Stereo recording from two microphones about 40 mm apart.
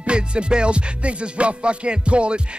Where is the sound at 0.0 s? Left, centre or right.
Right.